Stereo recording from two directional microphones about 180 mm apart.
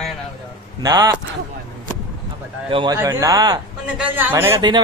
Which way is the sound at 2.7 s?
25° right (ahead or behind).